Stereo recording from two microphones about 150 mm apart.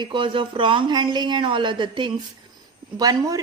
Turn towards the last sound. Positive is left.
turn(degrees=-25)  # may be behind; listen again after turning